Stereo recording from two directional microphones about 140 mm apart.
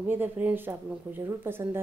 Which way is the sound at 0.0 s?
15° right (ahead or behind).